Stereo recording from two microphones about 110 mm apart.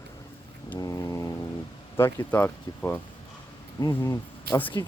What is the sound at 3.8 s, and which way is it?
Speech, 30° left (ahead or behind).